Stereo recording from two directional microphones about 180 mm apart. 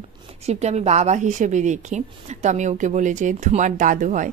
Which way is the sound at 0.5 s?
40° right (ahead or behind).